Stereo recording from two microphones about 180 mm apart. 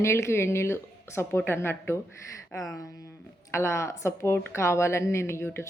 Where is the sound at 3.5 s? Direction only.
15° left (ahead or behind).